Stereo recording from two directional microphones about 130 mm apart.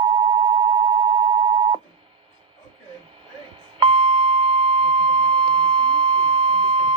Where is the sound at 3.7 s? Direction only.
45° right (ahead or behind).